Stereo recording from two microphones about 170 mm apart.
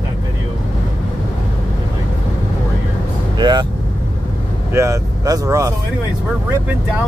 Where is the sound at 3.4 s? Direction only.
25° right (ahead or behind).